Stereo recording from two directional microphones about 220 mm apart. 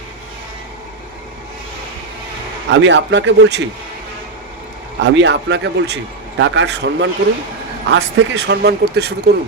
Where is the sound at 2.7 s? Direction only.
55° right (ahead or behind).